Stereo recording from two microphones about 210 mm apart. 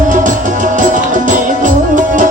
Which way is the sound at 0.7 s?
40° right (ahead or behind).